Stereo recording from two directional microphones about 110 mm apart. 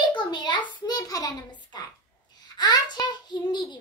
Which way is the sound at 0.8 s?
35° left (ahead or behind).